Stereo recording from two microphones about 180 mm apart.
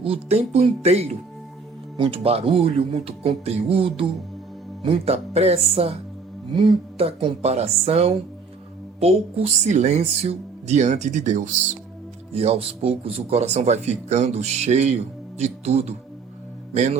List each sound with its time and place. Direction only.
0.0 s speech: 35° right (ahead or behind)